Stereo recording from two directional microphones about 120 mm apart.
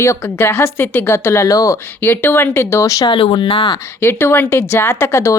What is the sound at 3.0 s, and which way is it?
Speech, 45° left (ahead or behind).